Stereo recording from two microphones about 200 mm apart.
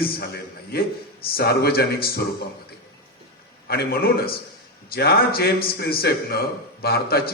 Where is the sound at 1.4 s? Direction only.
50° left (ahead or behind).